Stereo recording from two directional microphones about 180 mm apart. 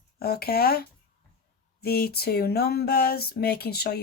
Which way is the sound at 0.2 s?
60° left (ahead or behind).